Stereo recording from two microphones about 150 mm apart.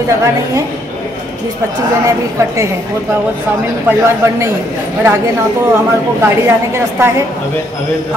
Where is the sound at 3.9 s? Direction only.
20° right (ahead or behind).